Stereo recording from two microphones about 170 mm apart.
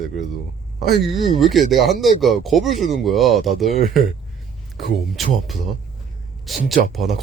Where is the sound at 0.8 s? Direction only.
Centre (ahead or behind).